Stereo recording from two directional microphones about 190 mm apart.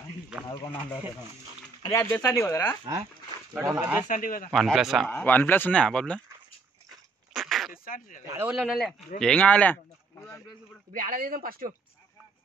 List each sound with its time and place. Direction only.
1.8 s speech: 15° left (ahead or behind)
2.8 s speech: 25° right (ahead or behind)
3.5 s a man's voice: 10° right (ahead or behind)
4.1 s speech: 45° left (ahead or behind)
4.5 s speech: centre (ahead or behind)
7.3 s a sound: centre (ahead or behind)
7.7 s speech: 50° left (ahead or behind)
8.3 s a man's voice: 10° right (ahead or behind); by 9.8 s 10° left (ahead or behind)
10.9 s speech: 45° right (ahead or behind)